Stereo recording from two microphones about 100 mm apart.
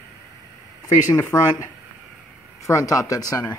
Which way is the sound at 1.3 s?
30° left (ahead or behind).